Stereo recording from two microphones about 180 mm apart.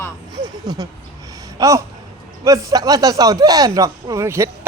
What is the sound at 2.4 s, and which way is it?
Speech, 20° right (ahead or behind).